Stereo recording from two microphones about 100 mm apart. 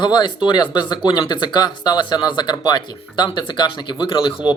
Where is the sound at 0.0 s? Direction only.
45° left (ahead or behind).